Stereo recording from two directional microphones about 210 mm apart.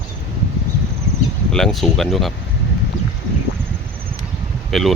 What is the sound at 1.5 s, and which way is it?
Speech, centre (ahead or behind).